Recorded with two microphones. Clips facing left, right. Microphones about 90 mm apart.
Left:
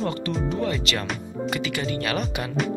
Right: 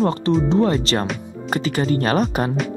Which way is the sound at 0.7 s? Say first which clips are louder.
Right 7 dB; 35° right (ahead or behind).